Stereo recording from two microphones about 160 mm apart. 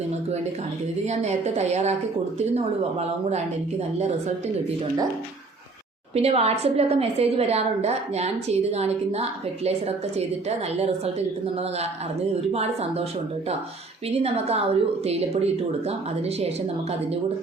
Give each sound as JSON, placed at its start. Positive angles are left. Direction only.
{"t": 1.0, "sound": "a woman's voice", "side_deg": -45}
{"t": 6.1, "sound": "a woman's voice", "side_deg": -40}
{"t": 14.2, "sound": "a woman's voice", "side_deg": -40}